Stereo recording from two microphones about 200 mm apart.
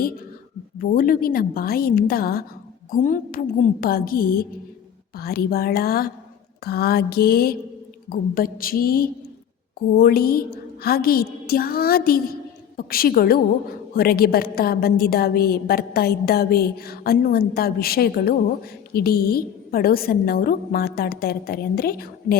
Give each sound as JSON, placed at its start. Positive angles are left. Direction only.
{"t": 0.8, "sound": "a woman's voice", "side_deg": 45}